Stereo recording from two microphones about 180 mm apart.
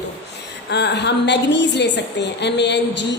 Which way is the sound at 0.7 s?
70° left (ahead or behind).